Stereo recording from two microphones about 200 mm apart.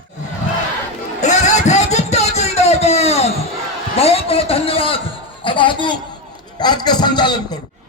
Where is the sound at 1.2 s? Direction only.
35° left (ahead or behind).